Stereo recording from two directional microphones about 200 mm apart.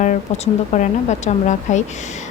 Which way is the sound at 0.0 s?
35° left (ahead or behind).